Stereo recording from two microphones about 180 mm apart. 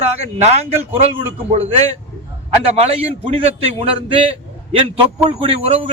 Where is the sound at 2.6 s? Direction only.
35° right (ahead or behind).